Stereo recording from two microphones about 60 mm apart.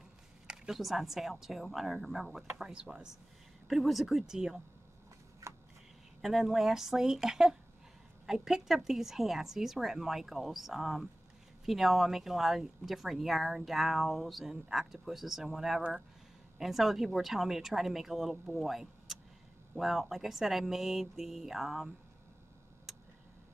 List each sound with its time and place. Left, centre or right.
0.5 s speech: centre
2.7 s speech: centre
3.6 s speech: centre
5.4 s a sound: right
6.2 s speech: centre